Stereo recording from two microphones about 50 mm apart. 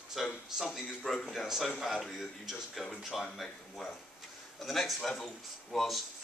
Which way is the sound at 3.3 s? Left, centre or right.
Centre.